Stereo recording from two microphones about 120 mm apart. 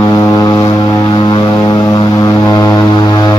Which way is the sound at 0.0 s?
30° left (ahead or behind).